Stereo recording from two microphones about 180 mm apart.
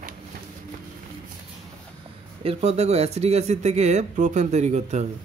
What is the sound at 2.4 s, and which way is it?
Speech, 35° right (ahead or behind).